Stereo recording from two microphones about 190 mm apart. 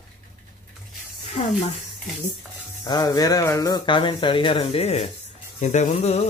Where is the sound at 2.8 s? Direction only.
20° left (ahead or behind).